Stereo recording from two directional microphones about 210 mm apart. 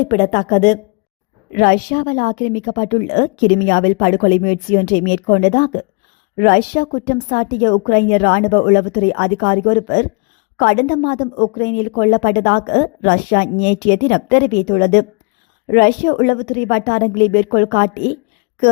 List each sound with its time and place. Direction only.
0.1 s a woman's voice: 30° left (ahead or behind)
1.5 s a woman's voice: 45° left (ahead or behind)